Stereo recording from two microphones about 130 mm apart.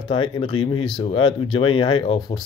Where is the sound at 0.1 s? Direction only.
40° left (ahead or behind).